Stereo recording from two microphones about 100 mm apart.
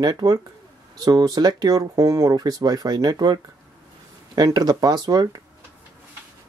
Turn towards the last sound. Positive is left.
turn(degrees=-40)  # may be behind; listen again after turning